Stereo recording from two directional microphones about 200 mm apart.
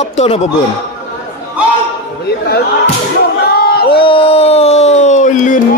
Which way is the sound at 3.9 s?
25° left (ahead or behind).